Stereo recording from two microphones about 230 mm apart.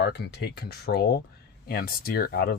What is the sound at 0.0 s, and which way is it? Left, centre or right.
Speech, left.